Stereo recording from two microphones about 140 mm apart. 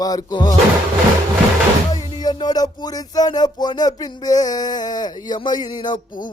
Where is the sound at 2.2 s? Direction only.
30° left (ahead or behind).